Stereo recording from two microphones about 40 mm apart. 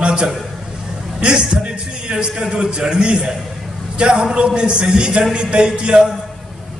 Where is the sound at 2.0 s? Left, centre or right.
Right.